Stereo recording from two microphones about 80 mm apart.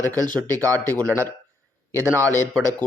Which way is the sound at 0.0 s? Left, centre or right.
Right.